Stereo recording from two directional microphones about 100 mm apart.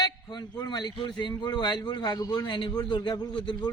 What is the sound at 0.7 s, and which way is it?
A man's voice, 45° left (ahead or behind).